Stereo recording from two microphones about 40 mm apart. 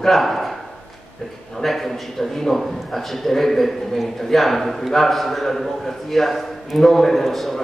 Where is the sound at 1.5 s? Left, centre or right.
Centre.